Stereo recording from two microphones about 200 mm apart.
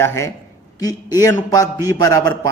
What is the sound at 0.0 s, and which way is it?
A man's voice, 15° left (ahead or behind).